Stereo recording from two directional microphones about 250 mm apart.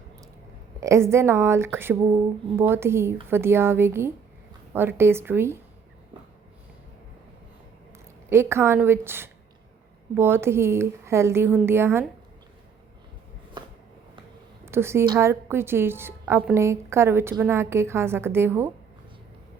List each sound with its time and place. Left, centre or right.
0.8 s a woman's voice: centre
8.3 s a woman's voice: centre
13.6 s a sound: centre
14.6 s a woman's voice: centre